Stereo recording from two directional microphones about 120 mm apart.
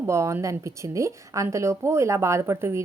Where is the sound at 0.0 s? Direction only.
25° right (ahead or behind).